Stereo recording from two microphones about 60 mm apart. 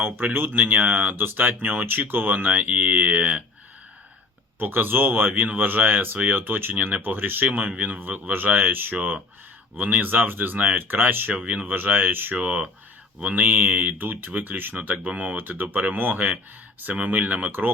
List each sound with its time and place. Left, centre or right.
0.0 s speech: right
0.8 s speech: right
1.1 s speech: right
4.6 s speech: right
16.1 s speech: right